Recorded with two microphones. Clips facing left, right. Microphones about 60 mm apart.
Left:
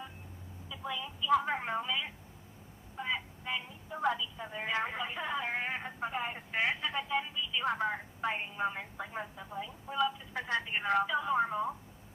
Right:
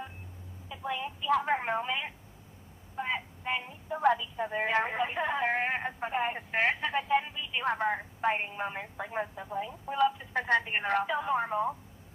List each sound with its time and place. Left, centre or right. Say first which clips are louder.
0.7 s music: right 4 dB; right
1.5 s a woman's voice: right 4 dB; right